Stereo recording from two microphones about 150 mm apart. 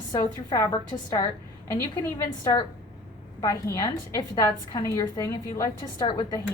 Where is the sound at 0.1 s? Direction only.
25° left (ahead or behind).